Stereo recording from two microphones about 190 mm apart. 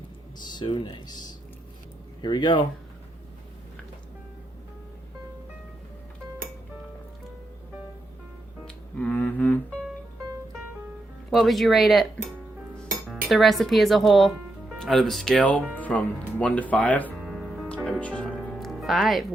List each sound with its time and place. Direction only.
0.3 s speech: 25° left (ahead or behind)
8.6 s music: 5° left (ahead or behind)
11.3 s speech: centre (ahead or behind)
13.1 s speech: centre (ahead or behind)
17.3 s music: centre (ahead or behind)